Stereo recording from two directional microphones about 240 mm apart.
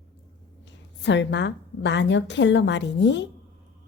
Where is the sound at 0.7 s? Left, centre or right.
Left.